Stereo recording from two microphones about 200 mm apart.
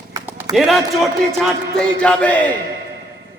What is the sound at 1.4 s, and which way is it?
Music, 5° left (ahead or behind).